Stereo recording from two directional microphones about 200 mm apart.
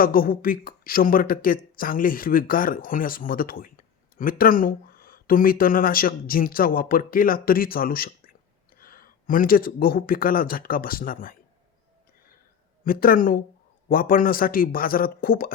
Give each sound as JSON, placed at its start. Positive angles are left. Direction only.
{"t": 0.0, "sound": "speech", "side_deg": 45}
{"t": 12.8, "sound": "speech", "side_deg": 45}